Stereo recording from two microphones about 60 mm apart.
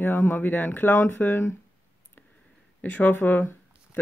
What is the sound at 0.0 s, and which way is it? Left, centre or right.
Speech, left.